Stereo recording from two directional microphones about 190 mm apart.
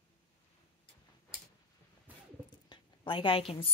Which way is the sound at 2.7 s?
25° left (ahead or behind).